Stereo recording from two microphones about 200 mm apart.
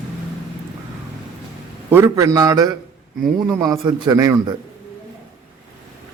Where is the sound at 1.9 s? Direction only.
15° right (ahead or behind).